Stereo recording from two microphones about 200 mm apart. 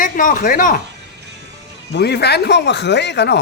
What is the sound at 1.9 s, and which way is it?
Speech, 55° left (ahead or behind).